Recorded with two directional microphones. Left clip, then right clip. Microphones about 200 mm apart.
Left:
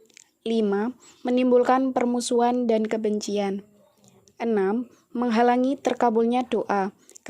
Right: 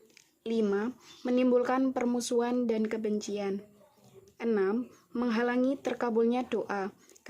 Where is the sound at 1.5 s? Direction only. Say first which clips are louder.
Left 8 dB; 30° left (ahead or behind).